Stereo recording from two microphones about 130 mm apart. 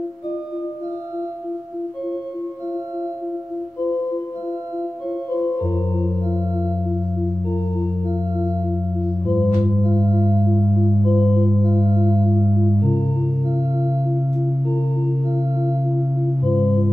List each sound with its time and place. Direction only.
5.3 s music: 15° left (ahead or behind)
11.1 s music: 15° left (ahead or behind)